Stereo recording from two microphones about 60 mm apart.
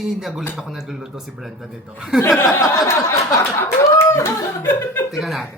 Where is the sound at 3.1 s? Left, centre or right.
Left.